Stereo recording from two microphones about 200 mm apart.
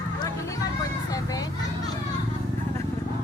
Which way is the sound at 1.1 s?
20° left (ahead or behind).